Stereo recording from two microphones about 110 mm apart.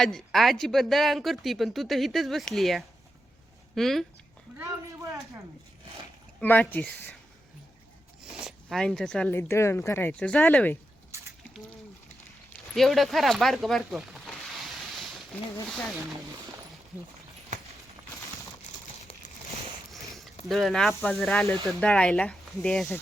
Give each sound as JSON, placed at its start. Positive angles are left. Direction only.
{"t": 0.0, "sound": "speech", "side_deg": 5}
{"t": 6.4, "sound": "speech", "side_deg": 15}
{"t": 8.4, "sound": "speech", "side_deg": 0}
{"t": 9.3, "sound": "speech", "side_deg": 20}
{"t": 12.7, "sound": "a sound", "side_deg": 0}
{"t": 15.6, "sound": "speech", "side_deg": 5}
{"t": 19.9, "sound": "a sound", "side_deg": 0}
{"t": 20.5, "sound": "speech", "side_deg": 0}